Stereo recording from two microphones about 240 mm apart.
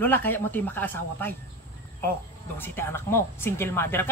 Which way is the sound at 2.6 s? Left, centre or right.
Centre.